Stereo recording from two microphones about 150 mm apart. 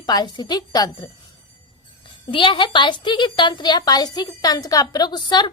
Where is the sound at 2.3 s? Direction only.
35° left (ahead or behind).